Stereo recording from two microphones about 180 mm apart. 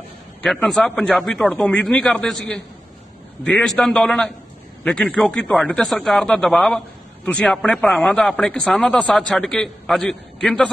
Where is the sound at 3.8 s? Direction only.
5° left (ahead or behind).